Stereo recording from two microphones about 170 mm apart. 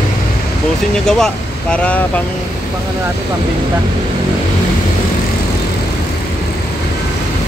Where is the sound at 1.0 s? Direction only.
5° left (ahead or behind).